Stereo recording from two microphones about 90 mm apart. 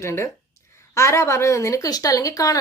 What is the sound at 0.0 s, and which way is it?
A woman's voice, 30° left (ahead or behind).